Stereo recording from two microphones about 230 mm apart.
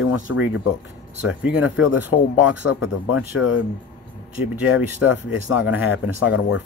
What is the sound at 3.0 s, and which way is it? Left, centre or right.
Speech, left.